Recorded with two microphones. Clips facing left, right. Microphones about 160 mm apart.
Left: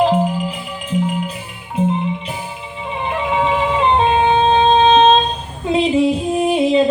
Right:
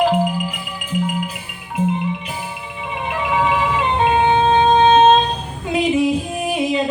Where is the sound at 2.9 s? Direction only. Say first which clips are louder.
Left 2 dB; 30° left (ahead or behind).